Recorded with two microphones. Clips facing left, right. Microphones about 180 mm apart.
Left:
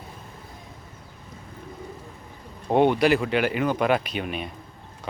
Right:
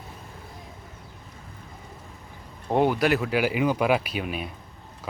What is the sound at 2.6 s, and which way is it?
Speech, centre (ahead or behind).